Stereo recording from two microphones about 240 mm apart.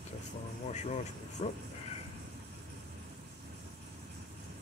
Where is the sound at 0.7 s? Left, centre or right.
Left.